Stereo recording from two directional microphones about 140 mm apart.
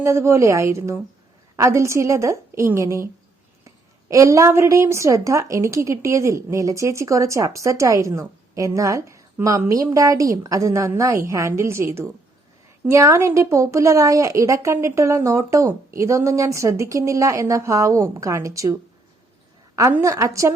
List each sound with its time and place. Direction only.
0.0 s a woman's voice: 20° right (ahead or behind)
4.1 s a woman's voice: 20° right (ahead or behind)
19.9 s a woman's voice: 20° right (ahead or behind)